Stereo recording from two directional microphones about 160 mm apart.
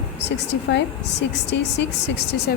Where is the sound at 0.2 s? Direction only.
90° left.